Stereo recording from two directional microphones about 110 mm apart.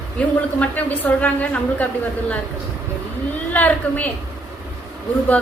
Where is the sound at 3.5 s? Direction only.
15° left (ahead or behind).